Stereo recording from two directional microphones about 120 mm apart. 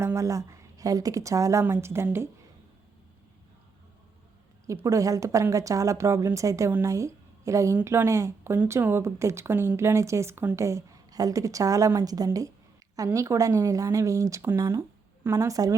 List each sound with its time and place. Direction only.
0.0 s speech: 25° right (ahead or behind)
4.6 s speech: 25° right (ahead or behind)